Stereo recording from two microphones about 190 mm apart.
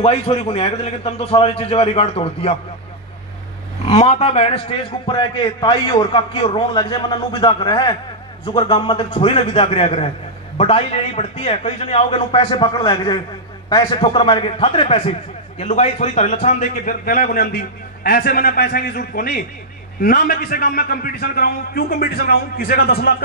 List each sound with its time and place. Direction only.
0.0 s a man's voice: 30° left (ahead or behind)
3.8 s a man's voice: 35° left (ahead or behind); by 23.1 s 55° left (ahead or behind)